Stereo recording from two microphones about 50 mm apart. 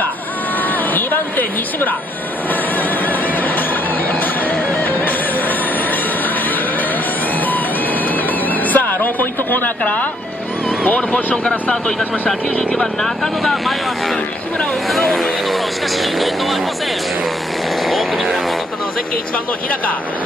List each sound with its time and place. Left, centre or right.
8.7 s a sound: left
11.1 s speech: left
12.3 s speech: centre
15.0 s speech: centre
17.8 s speech: centre